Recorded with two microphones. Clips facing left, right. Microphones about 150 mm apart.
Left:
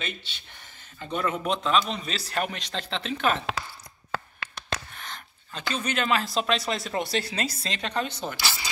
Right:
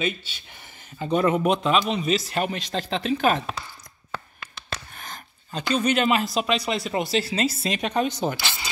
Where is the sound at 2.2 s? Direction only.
20° right (ahead or behind).